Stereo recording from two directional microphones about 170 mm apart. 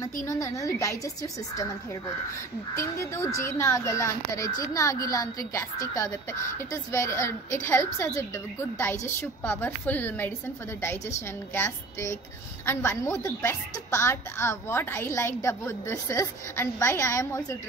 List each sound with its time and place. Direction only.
0.0 s speech: 20° left (ahead or behind)
2.8 s a woman's voice: 15° left (ahead or behind)
11.5 s a woman's voice: 15° left (ahead or behind)